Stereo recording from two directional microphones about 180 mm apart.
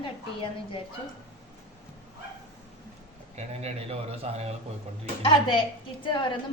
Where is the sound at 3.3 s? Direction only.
35° right (ahead or behind).